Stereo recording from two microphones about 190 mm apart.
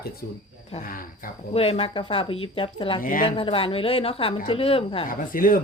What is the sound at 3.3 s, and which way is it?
Speech, 30° left (ahead or behind).